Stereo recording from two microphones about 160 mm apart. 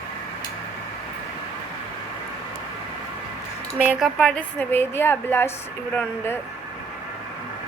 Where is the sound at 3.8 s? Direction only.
5° right (ahead or behind).